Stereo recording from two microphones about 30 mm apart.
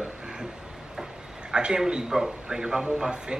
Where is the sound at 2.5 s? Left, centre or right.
Right.